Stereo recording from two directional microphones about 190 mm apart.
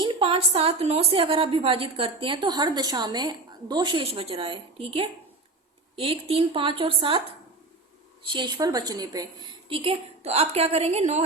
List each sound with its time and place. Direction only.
0.0 s a woman's voice: 30° right (ahead or behind)
8.3 s a woman's voice: 25° right (ahead or behind)